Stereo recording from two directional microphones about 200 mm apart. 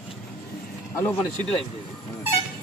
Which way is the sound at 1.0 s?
10° left (ahead or behind).